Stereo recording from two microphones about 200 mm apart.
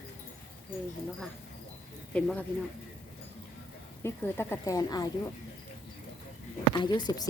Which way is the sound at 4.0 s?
15° left (ahead or behind).